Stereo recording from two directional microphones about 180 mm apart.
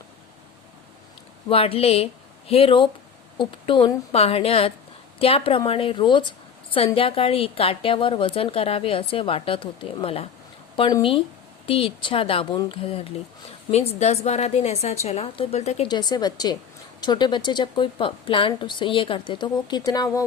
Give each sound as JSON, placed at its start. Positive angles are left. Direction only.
{"t": 1.5, "sound": "a woman's voice", "side_deg": 30}
{"t": 15.9, "sound": "a woman's voice", "side_deg": 25}